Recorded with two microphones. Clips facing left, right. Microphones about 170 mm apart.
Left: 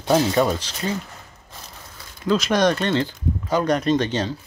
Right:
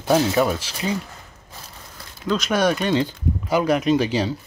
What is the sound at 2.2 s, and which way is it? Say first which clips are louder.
Speech: left 1 dB; centre (ahead or behind).